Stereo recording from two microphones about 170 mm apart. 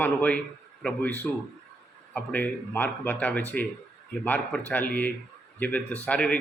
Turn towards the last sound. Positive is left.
turn(degrees=5)  # may be behind; listen again after turning